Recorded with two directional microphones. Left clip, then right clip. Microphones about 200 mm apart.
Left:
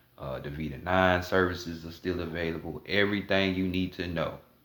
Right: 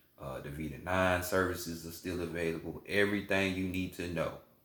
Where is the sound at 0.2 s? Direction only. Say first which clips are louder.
Left 5 dB; 40° left (ahead or behind).